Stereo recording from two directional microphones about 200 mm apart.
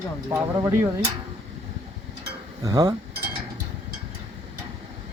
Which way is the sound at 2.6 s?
20° right (ahead or behind).